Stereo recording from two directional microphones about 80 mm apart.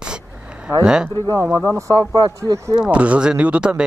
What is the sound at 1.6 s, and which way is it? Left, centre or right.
Speech, right.